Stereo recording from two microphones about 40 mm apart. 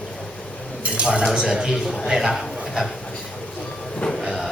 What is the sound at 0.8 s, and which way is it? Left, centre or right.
Dishes, right.